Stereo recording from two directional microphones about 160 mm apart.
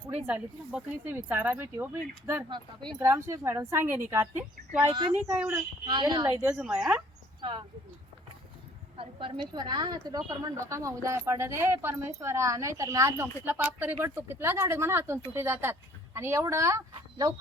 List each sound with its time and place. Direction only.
0.3 s speech: 10° right (ahead or behind)
2.5 s a woman's voice: 30° right (ahead or behind)
3.0 s speech: 15° right (ahead or behind)
5.8 s a woman's voice: 25° right (ahead or behind)
6.4 s speech: 10° right (ahead or behind)
7.4 s speech: 35° right (ahead or behind)
9.0 s a woman's voice: 35° right (ahead or behind)